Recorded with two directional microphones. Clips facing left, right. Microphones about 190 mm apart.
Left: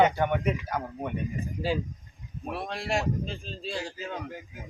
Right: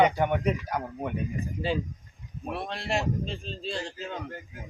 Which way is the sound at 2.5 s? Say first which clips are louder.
Even; centre (ahead or behind).